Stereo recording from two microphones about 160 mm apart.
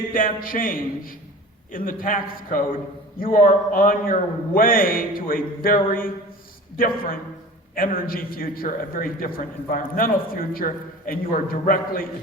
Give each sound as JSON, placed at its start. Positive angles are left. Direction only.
{"t": 0.1, "sound": "a man's voice", "side_deg": 60}